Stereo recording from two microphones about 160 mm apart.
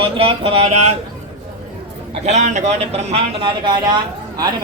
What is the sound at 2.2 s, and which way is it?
Speech, 45° right (ahead or behind).